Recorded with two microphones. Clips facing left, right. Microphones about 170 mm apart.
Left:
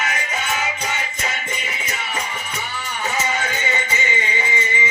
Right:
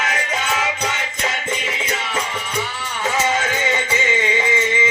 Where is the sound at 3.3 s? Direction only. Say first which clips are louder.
Right 4 dB; 90° right.